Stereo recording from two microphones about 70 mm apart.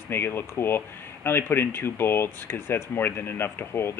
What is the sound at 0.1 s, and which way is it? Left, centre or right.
Speech, left.